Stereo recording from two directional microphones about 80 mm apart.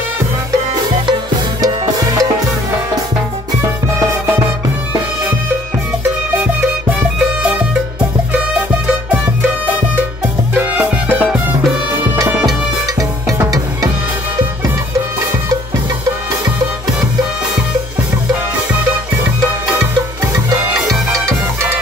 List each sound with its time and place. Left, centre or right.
1.6 s music: right
8.8 s music: right
10.5 s music: right